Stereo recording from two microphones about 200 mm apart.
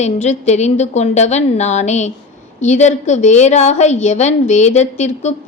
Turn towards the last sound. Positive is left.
turn(degrees=35)  # may be behind; listen again after turning